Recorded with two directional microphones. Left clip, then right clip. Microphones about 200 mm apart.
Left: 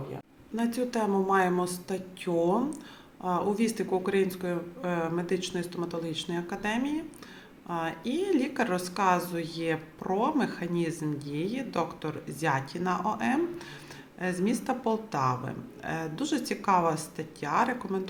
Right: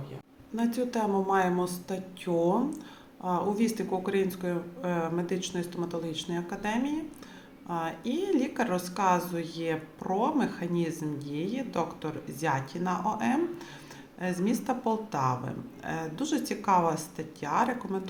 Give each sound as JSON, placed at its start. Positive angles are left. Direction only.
{"t": 0.5, "sound": "speech", "side_deg": 5}